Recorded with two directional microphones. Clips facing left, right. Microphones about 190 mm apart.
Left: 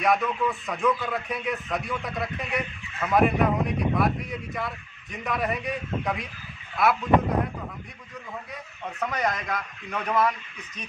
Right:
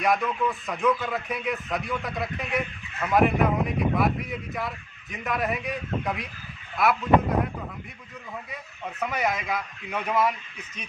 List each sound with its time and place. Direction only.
0.0 s speech: centre (ahead or behind)
9.0 s speech: 5° right (ahead or behind)